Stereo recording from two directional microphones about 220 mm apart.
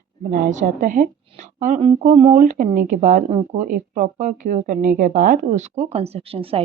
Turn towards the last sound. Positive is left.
turn(degrees=-25)  # may be behind; listen again after turning